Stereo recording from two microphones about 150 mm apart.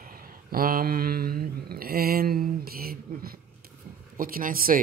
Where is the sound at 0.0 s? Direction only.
75° right (ahead or behind).